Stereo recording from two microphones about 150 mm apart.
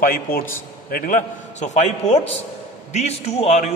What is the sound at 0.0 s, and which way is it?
A man's voice, 70° left (ahead or behind).